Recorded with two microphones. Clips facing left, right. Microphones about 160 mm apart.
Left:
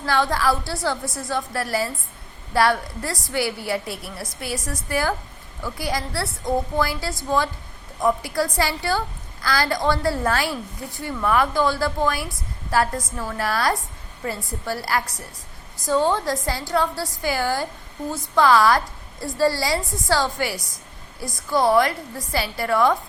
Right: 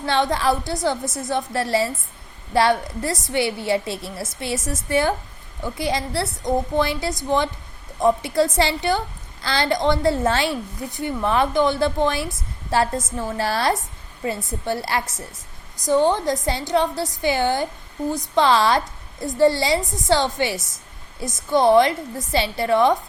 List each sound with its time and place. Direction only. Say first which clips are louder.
0.0 s a woman's voice: right 1 dB; 20° right (ahead or behind)